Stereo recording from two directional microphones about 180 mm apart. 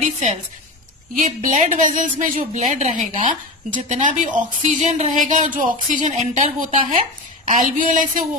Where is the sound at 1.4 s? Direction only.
45° right (ahead or behind).